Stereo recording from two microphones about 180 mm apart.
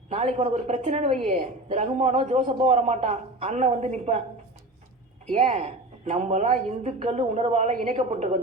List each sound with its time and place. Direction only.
0.1 s a woman's voice: 35° right (ahead or behind)
5.3 s a woman's voice: 35° right (ahead or behind)